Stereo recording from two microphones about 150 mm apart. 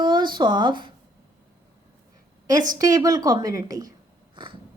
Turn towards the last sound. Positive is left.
turn(degrees=-25)  # may be behind; listen again after turning